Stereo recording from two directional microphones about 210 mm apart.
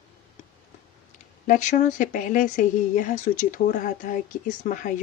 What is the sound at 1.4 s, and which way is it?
Speech, 40° left (ahead or behind).